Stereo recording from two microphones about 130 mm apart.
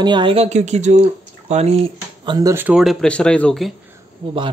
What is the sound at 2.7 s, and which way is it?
Speech, centre (ahead or behind).